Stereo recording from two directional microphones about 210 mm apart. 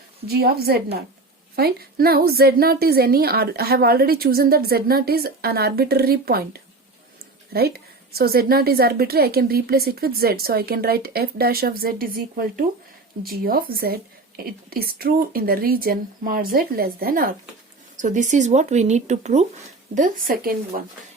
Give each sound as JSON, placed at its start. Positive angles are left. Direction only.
{"t": 0.3, "sound": "a woman's voice", "side_deg": -50}
{"t": 20.0, "sound": "a woman's voice", "side_deg": -45}